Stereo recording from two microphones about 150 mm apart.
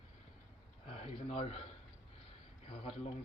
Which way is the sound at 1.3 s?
45° left (ahead or behind).